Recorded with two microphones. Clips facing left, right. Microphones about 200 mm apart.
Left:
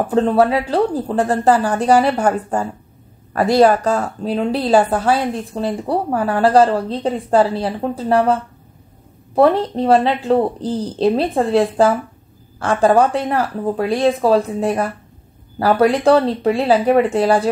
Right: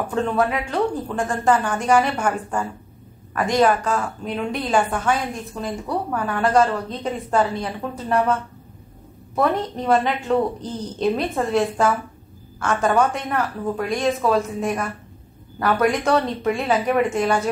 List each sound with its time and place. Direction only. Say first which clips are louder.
0.1 s speech: left 7 dB; 35° left (ahead or behind)